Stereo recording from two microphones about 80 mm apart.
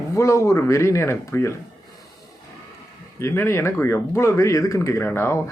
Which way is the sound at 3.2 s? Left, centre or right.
Left.